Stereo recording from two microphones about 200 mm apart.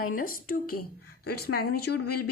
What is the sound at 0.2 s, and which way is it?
Speech, 45° left (ahead or behind).